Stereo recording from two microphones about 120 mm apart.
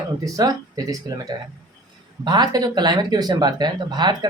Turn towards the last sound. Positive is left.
turn(degrees=-35)  # may be behind; listen again after turning